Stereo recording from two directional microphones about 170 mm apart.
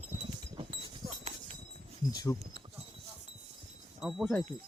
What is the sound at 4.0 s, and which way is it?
Speech, 5° right (ahead or behind).